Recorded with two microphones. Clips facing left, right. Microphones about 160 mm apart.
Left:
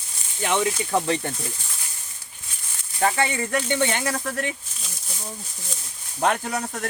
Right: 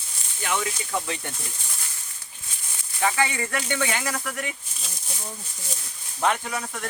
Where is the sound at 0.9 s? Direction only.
40° left (ahead or behind).